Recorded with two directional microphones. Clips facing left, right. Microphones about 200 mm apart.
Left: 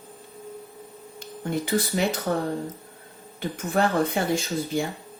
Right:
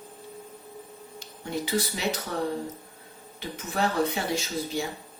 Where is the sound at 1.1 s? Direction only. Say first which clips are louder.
Left 4 dB; 50° left (ahead or behind).